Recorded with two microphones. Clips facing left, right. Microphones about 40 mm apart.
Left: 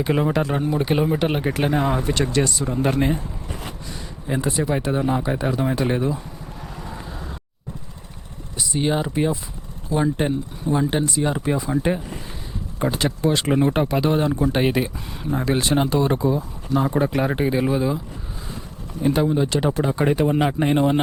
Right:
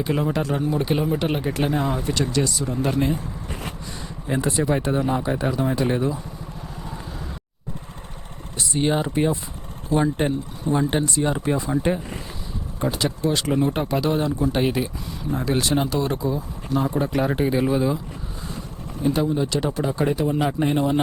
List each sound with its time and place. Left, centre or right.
0.0 s speech: centre
2.6 s speech: centre
4.3 s speech: centre
6.8 s vehicle: centre
8.5 s speech: centre
12.8 s speech: left
15.4 s speech: centre
19.0 s speech: centre
20.1 s speech: left
20.4 s speech: centre